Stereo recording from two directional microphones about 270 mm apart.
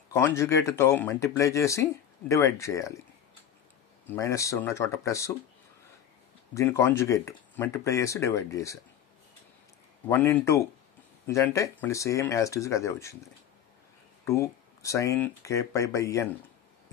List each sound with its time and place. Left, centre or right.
0.1 s speech: centre
4.1 s speech: centre
6.5 s speech: centre
10.0 s speech: centre
14.2 s speech: centre